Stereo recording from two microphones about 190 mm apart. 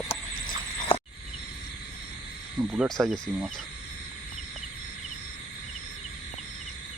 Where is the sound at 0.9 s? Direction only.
25° left (ahead or behind).